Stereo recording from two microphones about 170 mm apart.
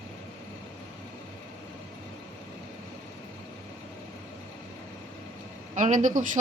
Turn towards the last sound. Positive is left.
turn(degrees=-50)  # may be behind; listen again after turning